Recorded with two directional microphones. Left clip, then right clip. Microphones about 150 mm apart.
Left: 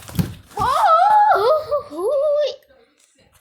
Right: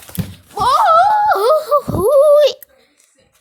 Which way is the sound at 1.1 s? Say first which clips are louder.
Right 1 dB; 40° right (ahead or behind).